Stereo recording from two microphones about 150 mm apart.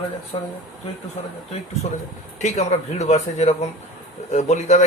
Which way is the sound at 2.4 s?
50° left (ahead or behind).